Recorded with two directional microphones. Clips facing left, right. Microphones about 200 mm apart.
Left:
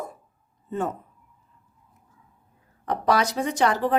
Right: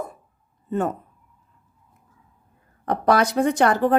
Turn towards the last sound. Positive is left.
turn(degrees=-50)  # may be behind; listen again after turning